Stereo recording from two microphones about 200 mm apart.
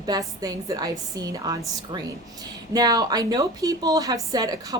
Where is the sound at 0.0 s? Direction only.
20° right (ahead or behind).